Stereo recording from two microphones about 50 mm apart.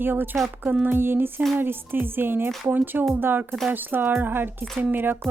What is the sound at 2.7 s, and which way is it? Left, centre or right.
Speech, right.